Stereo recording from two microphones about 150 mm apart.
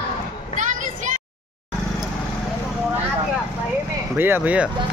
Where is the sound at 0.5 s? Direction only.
55° right (ahead or behind).